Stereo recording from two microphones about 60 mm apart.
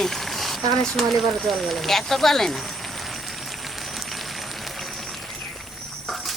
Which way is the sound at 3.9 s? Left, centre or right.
Centre.